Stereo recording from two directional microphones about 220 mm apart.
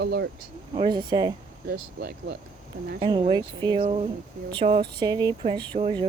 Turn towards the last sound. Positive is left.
turn(degrees=-20)  # may be behind; listen again after turning